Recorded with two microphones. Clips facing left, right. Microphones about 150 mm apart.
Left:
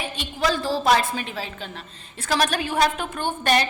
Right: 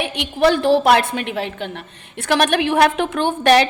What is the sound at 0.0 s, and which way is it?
A woman's voice, 70° right (ahead or behind).